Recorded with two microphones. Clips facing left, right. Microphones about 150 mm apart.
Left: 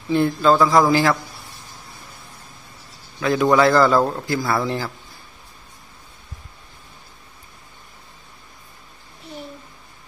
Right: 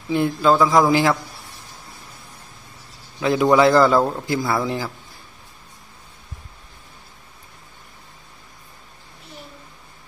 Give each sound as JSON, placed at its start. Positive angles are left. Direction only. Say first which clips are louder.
{"t": 0.1, "sound": "a man's voice", "louder": "left 1 dB", "side_deg": -10}
{"t": 3.2, "sound": "a man's voice", "louder": "right 1 dB", "side_deg": -20}